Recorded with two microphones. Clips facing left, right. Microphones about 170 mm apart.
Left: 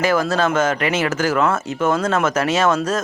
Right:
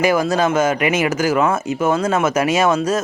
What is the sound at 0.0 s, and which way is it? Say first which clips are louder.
Speech: right 2 dB; 10° right (ahead or behind).